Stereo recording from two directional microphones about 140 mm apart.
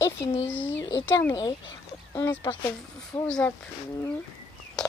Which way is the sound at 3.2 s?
5° left (ahead or behind).